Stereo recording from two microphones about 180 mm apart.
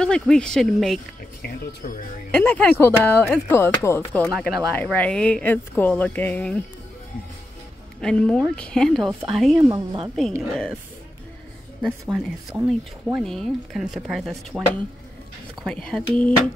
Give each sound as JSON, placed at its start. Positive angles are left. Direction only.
{"t": 0.0, "sound": "speech", "side_deg": 5}
{"t": 2.3, "sound": "speech", "side_deg": 10}
{"t": 8.0, "sound": "speech", "side_deg": 5}
{"t": 9.6, "sound": "speech", "side_deg": -20}
{"t": 11.8, "sound": "speech", "side_deg": -5}
{"t": 15.6, "sound": "speech", "side_deg": 5}